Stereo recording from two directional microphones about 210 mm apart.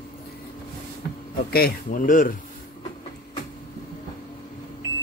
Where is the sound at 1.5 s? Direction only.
45° left (ahead or behind).